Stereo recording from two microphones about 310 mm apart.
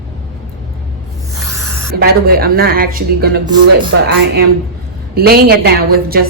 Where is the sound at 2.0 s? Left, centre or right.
Right.